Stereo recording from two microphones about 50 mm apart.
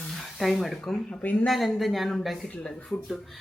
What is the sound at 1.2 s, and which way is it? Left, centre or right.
Speech, left.